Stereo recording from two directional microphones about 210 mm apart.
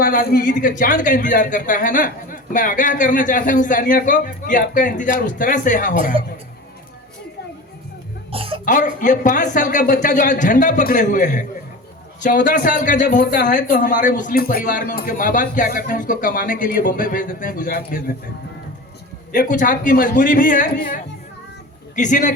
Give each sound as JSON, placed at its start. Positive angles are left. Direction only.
{"t": 0.0, "sound": "speech", "side_deg": 45}
{"t": 8.3, "sound": "cough", "side_deg": -25}
{"t": 8.6, "sound": "speech", "side_deg": 40}
{"t": 19.3, "sound": "speech", "side_deg": 40}